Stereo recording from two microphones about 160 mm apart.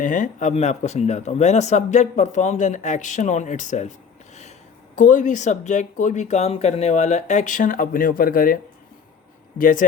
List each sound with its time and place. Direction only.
0.0 s speech: 50° left (ahead or behind)
4.9 s speech: 55° left (ahead or behind)
9.6 s speech: 55° left (ahead or behind)